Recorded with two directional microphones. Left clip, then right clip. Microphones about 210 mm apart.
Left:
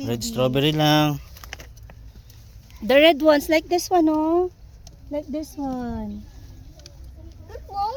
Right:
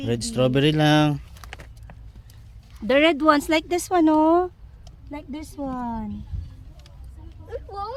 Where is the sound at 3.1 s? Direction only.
15° right (ahead or behind); by 4.5 s 45° right (ahead or behind).